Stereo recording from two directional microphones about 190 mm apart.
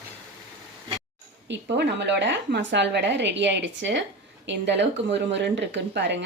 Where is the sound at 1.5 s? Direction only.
65° right (ahead or behind).